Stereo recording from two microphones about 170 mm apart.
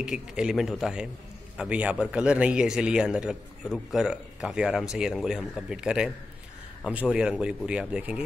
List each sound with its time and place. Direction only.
0.0 s a man's voice: 5° right (ahead or behind)